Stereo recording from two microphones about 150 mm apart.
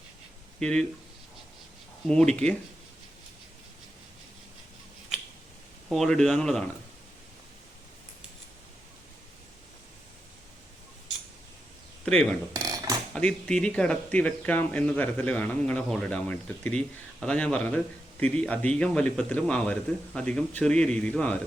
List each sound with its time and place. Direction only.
0.6 s speech: 5° left (ahead or behind)
2.0 s speech: 5° left (ahead or behind)
5.9 s speech: centre (ahead or behind)
12.0 s speech: 5° left (ahead or behind)
12.6 s mechanisms: 25° right (ahead or behind)
13.1 s speech: 5° left (ahead or behind)